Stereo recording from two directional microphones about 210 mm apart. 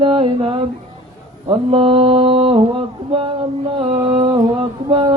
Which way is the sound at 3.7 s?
25° right (ahead or behind).